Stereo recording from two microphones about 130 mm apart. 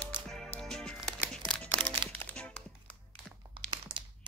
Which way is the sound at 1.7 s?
40° right (ahead or behind).